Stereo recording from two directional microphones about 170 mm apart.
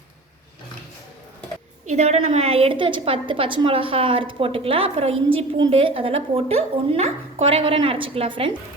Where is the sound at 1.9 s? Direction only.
40° right (ahead or behind).